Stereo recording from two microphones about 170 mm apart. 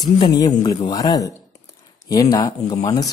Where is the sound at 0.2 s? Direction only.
25° left (ahead or behind).